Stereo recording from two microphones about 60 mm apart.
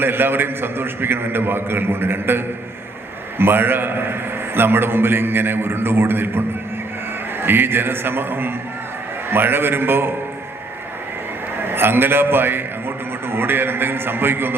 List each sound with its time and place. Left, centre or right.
0.0 s a man's voice: right
7.4 s a man's voice: right
11.6 s a man's voice: right